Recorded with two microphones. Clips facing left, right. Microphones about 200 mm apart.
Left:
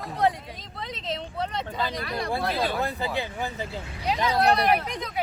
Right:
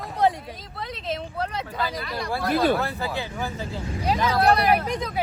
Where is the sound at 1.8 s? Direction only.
25° left (ahead or behind).